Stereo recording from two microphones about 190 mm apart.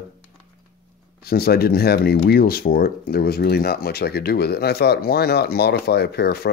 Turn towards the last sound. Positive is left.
turn(degrees=55)  # may be behind; listen again after turning